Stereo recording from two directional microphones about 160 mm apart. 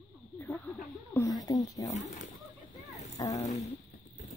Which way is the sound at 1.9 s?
45° left (ahead or behind).